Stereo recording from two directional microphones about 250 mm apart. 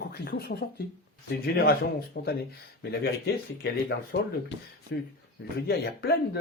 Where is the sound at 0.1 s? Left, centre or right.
Left.